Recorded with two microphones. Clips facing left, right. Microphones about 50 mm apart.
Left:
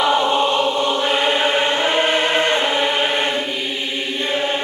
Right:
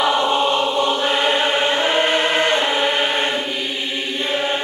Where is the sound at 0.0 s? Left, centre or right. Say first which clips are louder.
Left 1 dB; centre.